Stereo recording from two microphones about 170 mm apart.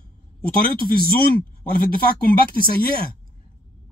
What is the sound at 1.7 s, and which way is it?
A man's voice, 60° left (ahead or behind).